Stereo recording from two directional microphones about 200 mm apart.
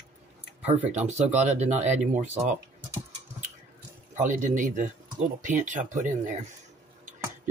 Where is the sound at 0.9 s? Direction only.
35° right (ahead or behind).